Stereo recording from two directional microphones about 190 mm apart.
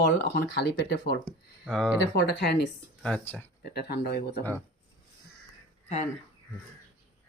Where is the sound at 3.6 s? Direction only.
60° left (ahead or behind).